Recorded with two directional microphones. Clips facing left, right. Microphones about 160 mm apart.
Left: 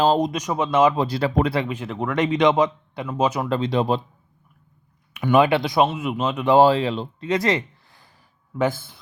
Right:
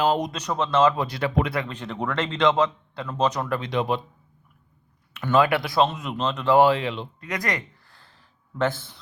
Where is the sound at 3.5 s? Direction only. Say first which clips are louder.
Left 4 dB; 30° left (ahead or behind).